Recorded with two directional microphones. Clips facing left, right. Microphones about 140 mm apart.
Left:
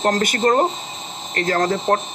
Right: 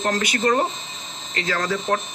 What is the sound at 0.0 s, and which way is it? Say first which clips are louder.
Speech: left 4 dB; 45° left (ahead or behind).